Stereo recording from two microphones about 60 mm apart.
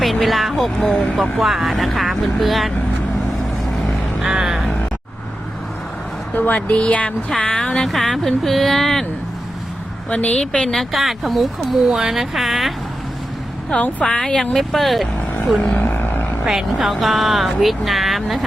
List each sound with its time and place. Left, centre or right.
0.0 s speech: centre
1.1 s speech: centre
4.2 s music: centre
6.3 s speech: left; by 9.0 s centre
10.1 s speech: left
10.8 s speech: centre
14.0 s speech: centre
15.8 s vehicle: left
16.5 s speech: centre